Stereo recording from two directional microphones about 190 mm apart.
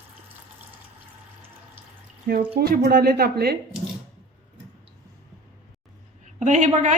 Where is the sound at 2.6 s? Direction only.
55° right (ahead or behind).